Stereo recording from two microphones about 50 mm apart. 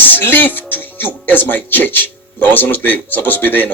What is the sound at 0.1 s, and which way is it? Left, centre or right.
Speech, left.